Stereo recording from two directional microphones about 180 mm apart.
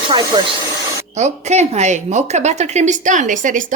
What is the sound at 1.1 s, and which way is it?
A woman's voice, 40° right (ahead or behind).